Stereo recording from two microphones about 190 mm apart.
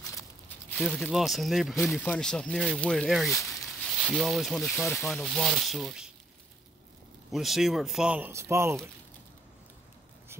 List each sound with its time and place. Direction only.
0.1 s a sound: 15° left (ahead or behind)
0.7 s speech: centre (ahead or behind)
7.2 s speech: centre (ahead or behind)